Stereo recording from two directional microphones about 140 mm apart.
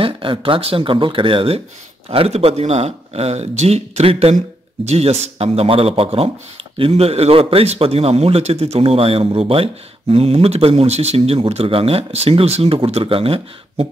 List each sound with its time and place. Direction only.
0.0 s speech: 40° right (ahead or behind)